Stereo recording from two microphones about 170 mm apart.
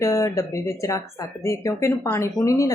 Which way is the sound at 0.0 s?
15° left (ahead or behind).